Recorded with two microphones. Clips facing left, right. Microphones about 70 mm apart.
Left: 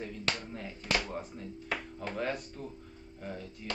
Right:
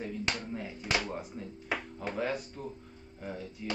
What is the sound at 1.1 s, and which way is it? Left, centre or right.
Speech, centre.